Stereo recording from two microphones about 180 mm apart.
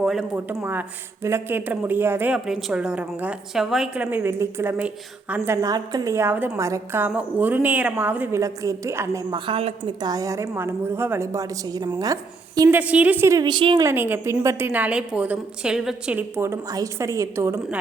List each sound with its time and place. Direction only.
0.0 s a sound: centre (ahead or behind)
0.3 s speech: 10° right (ahead or behind)
9.5 s speech: 30° right (ahead or behind)
13.8 s speech: 10° right (ahead or behind)